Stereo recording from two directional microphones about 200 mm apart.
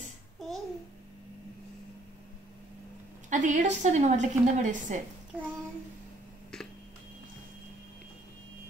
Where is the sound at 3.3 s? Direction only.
40° right (ahead or behind).